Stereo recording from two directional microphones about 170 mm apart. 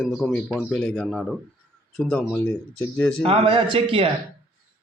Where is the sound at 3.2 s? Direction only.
35° right (ahead or behind).